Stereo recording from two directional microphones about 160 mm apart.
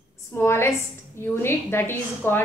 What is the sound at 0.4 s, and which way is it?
A woman's voice, 15° left (ahead or behind).